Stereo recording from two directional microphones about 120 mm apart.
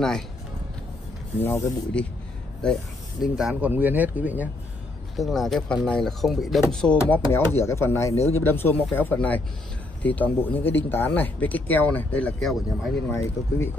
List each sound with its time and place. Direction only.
1.4 s speech: 15° left (ahead or behind)
3.3 s speech: 5° right (ahead or behind)
5.1 s speech: centre (ahead or behind)
7.3 s speech: 20° left (ahead or behind); by 12.9 s 5° left (ahead or behind)
13.1 s speech: 25° left (ahead or behind)